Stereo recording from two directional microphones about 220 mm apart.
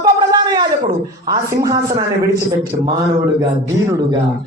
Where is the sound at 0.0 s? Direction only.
20° right (ahead or behind).